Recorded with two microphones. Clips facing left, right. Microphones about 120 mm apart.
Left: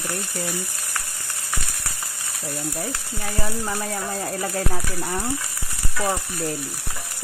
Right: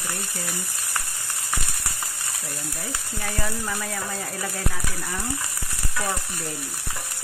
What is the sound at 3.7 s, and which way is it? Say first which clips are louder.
Speech: left 3 dB; 40° left (ahead or behind).